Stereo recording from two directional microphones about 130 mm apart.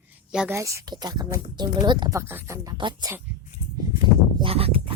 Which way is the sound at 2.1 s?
20° right (ahead or behind).